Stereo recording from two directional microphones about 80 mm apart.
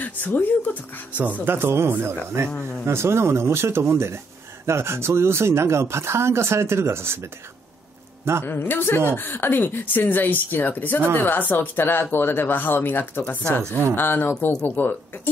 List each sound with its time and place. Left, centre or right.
0.0 s speech: left
1.1 s speech: right
8.5 s speech: left
13.7 s speech: right
13.9 s speech: left